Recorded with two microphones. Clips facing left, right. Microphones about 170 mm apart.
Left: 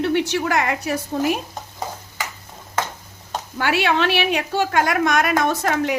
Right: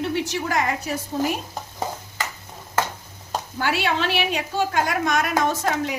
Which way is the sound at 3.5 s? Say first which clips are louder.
Left 4 dB; 70° left (ahead or behind).